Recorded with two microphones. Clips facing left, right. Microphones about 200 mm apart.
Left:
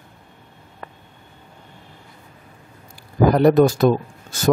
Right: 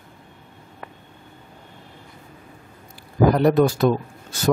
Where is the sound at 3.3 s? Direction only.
45° left (ahead or behind).